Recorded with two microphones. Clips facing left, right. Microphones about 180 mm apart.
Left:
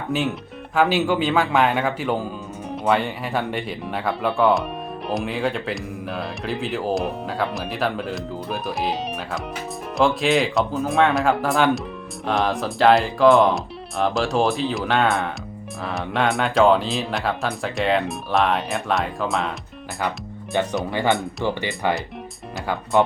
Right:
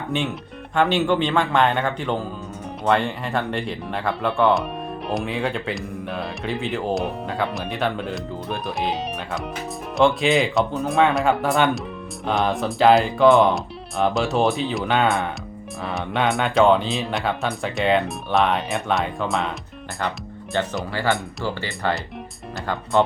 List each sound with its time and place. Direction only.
0.1 s speech: centre (ahead or behind)
20.9 s speech: 20° left (ahead or behind)
23.0 s speech: 10° left (ahead or behind)